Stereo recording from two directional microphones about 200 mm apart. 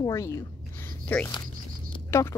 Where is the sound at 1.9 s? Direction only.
15° left (ahead or behind).